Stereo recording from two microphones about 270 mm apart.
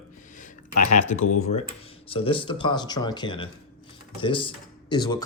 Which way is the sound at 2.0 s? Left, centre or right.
Left.